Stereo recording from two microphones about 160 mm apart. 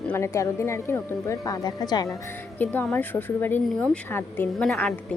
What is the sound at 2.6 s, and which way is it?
A woman's voice, 10° left (ahead or behind).